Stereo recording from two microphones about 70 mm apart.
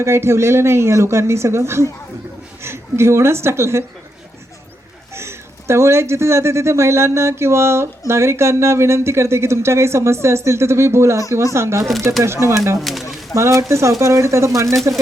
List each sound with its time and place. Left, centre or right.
0.0 s speech: right
5.1 s speech: right
12.8 s speech: centre
13.3 s speech: right